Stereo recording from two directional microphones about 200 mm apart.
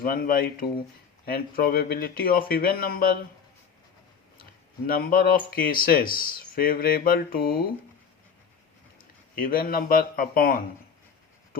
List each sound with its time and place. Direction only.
0.0 s speech: 45° left (ahead or behind)
4.9 s speech: 50° left (ahead or behind)
9.3 s speech: 45° left (ahead or behind)